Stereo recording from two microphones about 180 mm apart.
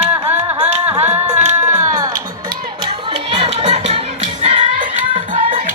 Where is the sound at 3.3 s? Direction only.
35° right (ahead or behind).